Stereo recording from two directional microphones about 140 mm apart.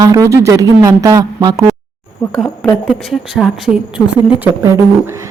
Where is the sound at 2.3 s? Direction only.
10° left (ahead or behind).